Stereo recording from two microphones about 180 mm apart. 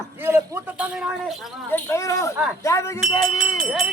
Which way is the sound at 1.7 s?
15° left (ahead or behind).